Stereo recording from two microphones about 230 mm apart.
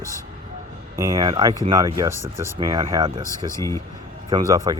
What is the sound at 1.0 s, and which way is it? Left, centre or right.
Speech, centre.